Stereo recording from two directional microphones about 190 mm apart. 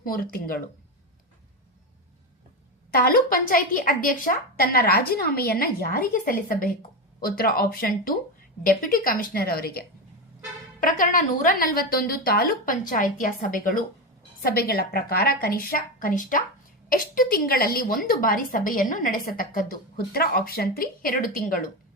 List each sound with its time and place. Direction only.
0.0 s a woman's voice: 50° left (ahead or behind)
2.9 s a woman's voice: 50° left (ahead or behind)